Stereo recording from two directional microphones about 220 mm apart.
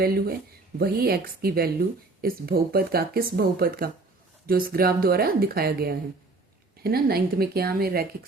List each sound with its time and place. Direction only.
0.0 s speech: 45° right (ahead or behind)